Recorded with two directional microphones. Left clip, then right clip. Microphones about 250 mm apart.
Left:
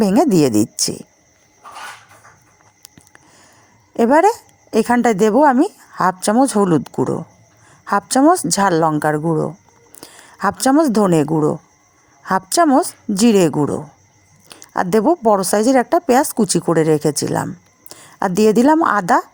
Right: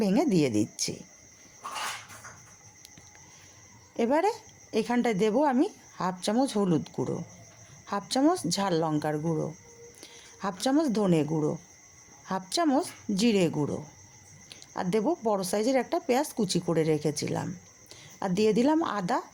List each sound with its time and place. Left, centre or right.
0.0 s speech: left
3.9 s a woman's voice: left